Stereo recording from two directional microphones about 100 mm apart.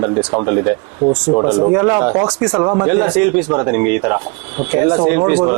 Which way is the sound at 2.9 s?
15° right (ahead or behind).